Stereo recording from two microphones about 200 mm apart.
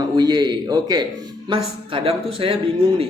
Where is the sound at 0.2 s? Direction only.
20° right (ahead or behind).